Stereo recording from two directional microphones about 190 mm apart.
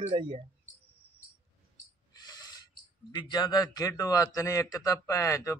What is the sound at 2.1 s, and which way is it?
Owl, 20° left (ahead or behind).